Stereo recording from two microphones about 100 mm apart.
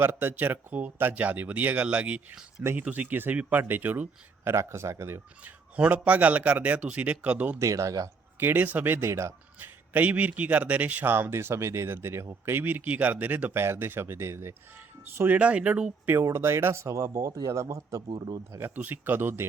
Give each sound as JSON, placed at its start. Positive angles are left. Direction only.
{"t": 0.0, "sound": "speech", "side_deg": -20}
{"t": 5.4, "sound": "speech", "side_deg": -15}
{"t": 7.6, "sound": "speech", "side_deg": -35}
{"t": 8.4, "sound": "speech", "side_deg": -20}
{"t": 18.6, "sound": "speech", "side_deg": -20}